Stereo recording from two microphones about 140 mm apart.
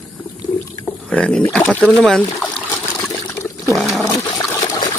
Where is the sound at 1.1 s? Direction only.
5° left (ahead or behind).